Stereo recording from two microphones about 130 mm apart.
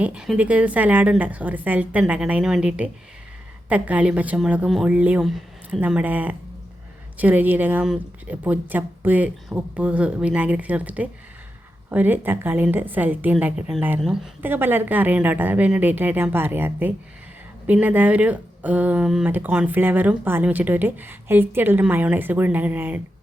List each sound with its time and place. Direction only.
0.0 s speech: 5° right (ahead or behind)